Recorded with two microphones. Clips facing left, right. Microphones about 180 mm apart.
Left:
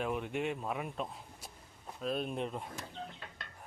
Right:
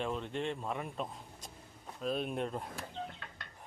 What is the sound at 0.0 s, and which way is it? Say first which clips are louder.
Speech: left 1 dB; 10° left (ahead or behind).